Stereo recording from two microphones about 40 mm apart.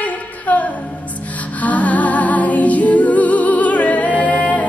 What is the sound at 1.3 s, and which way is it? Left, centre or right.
Music, left.